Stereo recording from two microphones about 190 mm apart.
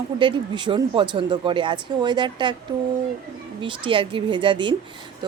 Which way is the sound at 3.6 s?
25° right (ahead or behind).